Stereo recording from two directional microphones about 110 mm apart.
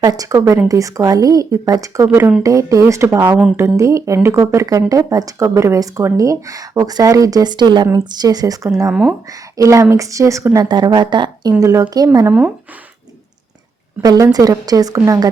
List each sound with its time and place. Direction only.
0.0 s speech: 35° right (ahead or behind)
8.9 s speech: 10° right (ahead or behind)
9.3 s speech: 30° right (ahead or behind)
11.6 s speech: 30° right (ahead or behind)
14.0 s speech: 35° right (ahead or behind)